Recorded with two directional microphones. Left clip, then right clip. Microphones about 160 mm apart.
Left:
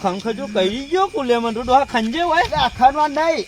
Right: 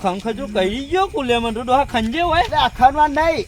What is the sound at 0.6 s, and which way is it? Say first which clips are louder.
Speech: even; 50° right (ahead or behind).